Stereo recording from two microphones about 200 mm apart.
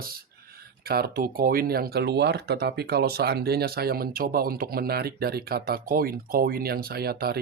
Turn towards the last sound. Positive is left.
turn(degrees=-50)  # may be behind; listen again after turning